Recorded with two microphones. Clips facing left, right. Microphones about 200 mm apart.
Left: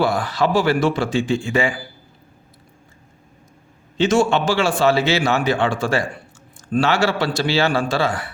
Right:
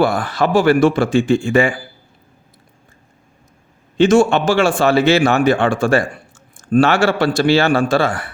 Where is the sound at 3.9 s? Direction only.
50° right (ahead or behind).